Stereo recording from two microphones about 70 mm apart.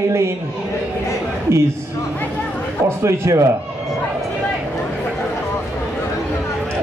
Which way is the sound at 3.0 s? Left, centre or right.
Right.